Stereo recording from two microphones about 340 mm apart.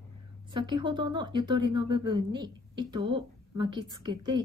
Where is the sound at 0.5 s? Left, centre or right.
Centre.